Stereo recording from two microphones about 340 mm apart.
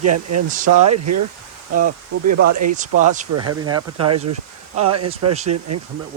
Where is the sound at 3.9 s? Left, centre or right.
Right.